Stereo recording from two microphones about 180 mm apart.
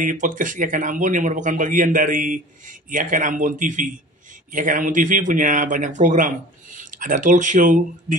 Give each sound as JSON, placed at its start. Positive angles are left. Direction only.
{"t": 0.0, "sound": "speech", "side_deg": -45}